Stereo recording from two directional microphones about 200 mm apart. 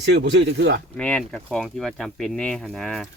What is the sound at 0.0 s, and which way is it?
Speech, 60° right (ahead or behind).